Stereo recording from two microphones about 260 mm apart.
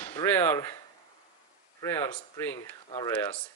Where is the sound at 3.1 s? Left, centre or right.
Centre.